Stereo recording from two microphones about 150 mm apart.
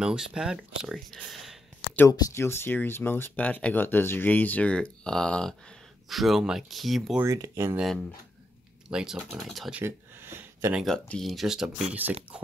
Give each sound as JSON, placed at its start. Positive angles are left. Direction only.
{"t": 0.0, "sound": "speech", "side_deg": -5}
{"t": 2.0, "sound": "speech", "side_deg": 20}
{"t": 7.2, "sound": "speech", "side_deg": -20}
{"t": 8.8, "sound": "speech", "side_deg": -5}
{"t": 9.8, "sound": "a sound", "side_deg": -15}
{"t": 10.8, "sound": "speech", "side_deg": 5}